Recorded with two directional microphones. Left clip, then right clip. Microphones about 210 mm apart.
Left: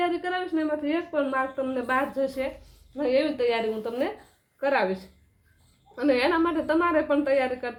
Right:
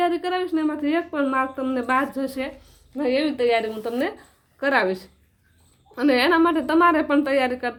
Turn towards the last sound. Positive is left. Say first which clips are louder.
# right 3 dB
turn(degrees=-40)  # may be behind; listen again after turning